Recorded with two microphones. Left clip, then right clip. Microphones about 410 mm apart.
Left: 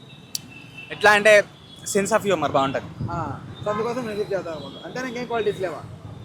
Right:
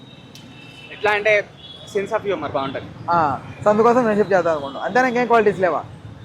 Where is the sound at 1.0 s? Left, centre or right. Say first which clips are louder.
Left 3 dB; left.